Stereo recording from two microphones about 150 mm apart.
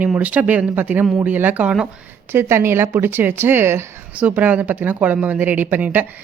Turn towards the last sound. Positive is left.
turn(degrees=-10)  # may be behind; listen again after turning